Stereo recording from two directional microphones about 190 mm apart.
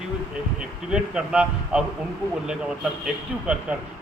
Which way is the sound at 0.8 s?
5° right (ahead or behind).